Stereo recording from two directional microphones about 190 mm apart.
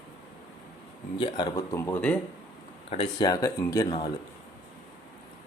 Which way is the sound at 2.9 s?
25° left (ahead or behind).